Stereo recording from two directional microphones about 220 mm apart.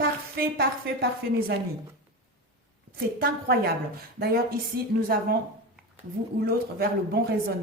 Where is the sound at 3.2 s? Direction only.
45° right (ahead or behind).